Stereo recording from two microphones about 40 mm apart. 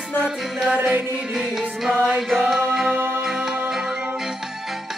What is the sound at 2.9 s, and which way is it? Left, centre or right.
Music, right.